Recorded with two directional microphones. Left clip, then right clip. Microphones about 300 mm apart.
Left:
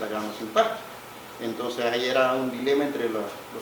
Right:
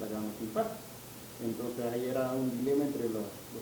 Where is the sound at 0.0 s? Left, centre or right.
Centre.